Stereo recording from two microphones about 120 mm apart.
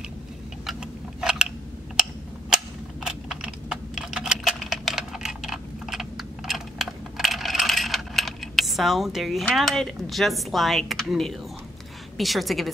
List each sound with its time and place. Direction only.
0.7 s a sound: 5° right (ahead or behind)
2.5 s typing: 5° right (ahead or behind)
12.2 s a woman's voice: centre (ahead or behind)